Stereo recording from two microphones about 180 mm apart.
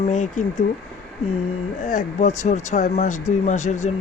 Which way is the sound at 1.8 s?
40° left (ahead or behind).